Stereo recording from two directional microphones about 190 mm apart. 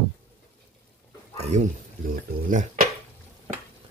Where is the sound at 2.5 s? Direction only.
45° right (ahead or behind).